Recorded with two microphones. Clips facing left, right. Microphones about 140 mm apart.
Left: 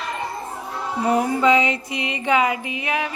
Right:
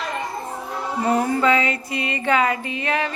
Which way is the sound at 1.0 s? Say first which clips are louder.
Left 1 dB; 10° left (ahead or behind).